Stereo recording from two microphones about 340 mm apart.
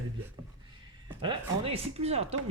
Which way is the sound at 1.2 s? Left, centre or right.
Centre.